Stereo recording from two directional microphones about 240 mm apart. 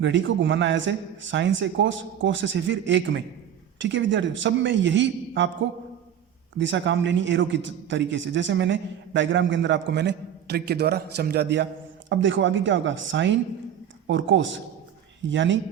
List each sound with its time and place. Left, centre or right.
0.0 s a man's voice: right
6.6 s a man's voice: right